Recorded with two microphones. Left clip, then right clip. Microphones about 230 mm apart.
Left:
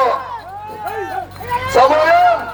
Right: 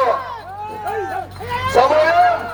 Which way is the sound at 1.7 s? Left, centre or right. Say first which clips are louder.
Left 2 dB; left.